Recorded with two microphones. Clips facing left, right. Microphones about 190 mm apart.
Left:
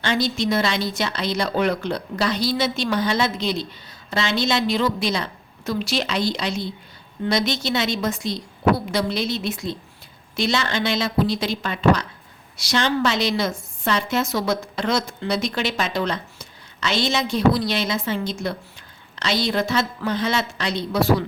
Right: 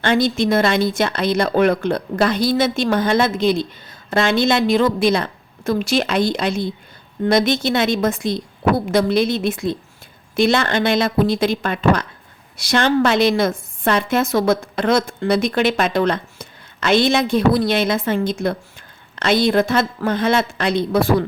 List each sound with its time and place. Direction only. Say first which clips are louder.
0.0 s a woman's voice: right 5 dB; 55° right (ahead or behind)